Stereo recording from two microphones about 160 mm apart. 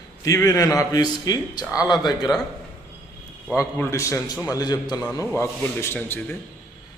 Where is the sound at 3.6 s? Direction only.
20° left (ahead or behind).